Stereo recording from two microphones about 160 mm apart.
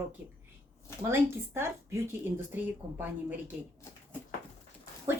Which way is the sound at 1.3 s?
15° right (ahead or behind).